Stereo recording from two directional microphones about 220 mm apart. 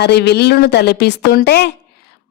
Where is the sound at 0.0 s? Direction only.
50° left (ahead or behind).